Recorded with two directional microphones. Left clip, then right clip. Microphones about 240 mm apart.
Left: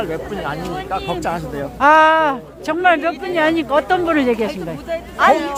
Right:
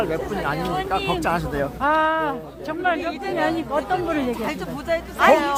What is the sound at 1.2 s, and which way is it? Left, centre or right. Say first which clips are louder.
Speech: even; centre.